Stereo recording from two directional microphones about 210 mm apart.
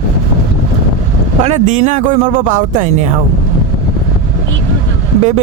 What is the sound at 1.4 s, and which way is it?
Speech, 30° right (ahead or behind).